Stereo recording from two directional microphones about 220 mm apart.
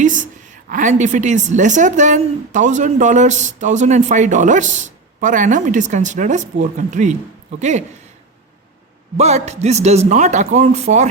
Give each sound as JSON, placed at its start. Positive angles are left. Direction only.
{"t": 0.0, "sound": "a woman's voice", "side_deg": -35}
{"t": 9.1, "sound": "a woman's voice", "side_deg": -30}